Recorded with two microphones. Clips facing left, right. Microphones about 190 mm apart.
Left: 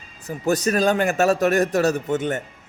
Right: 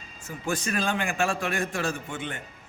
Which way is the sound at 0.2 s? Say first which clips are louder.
Left 9 dB; 40° left (ahead or behind).